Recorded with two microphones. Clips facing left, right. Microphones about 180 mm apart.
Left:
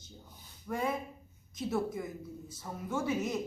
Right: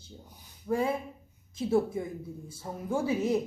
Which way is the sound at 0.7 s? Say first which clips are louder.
Right 5 dB; 30° right (ahead or behind).